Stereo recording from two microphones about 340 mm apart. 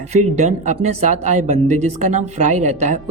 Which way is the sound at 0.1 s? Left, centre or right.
Right.